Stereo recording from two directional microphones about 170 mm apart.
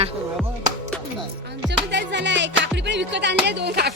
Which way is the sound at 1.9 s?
90° right.